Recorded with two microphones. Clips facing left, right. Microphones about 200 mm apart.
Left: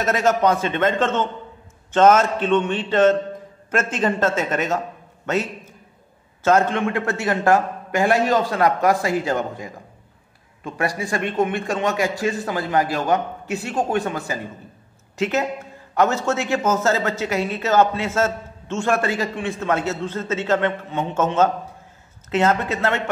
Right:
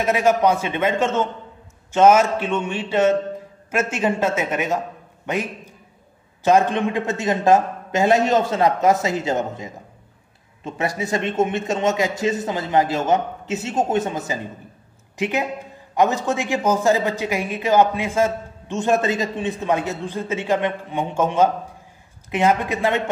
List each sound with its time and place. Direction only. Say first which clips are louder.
0.0 s a man's voice: right 1 dB; 10° right (ahead or behind)
5.2 s a sound: left 2 dB; 15° right (ahead or behind)
6.4 s a man's voice: right 1 dB; 15° right (ahead or behind)